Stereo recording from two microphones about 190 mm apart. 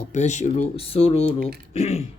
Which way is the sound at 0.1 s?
40° left (ahead or behind).